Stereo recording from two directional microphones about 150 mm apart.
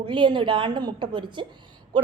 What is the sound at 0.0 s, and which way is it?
Speech, 30° right (ahead or behind).